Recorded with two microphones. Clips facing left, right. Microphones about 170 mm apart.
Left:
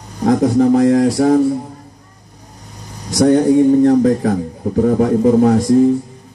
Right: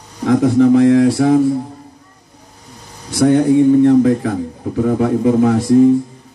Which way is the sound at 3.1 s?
40° left (ahead or behind).